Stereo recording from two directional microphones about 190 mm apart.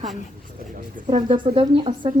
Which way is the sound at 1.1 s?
30° right (ahead or behind).